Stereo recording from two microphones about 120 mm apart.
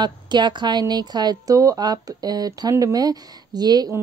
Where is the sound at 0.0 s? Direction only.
40° right (ahead or behind).